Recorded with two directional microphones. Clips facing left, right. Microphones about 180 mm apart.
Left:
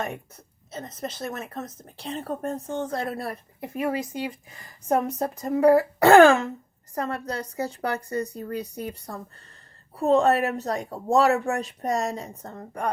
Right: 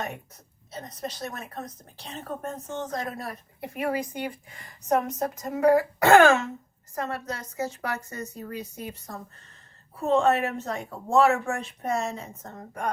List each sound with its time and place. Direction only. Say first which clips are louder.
0.7 s a woman's voice: left 2 dB; 25° left (ahead or behind)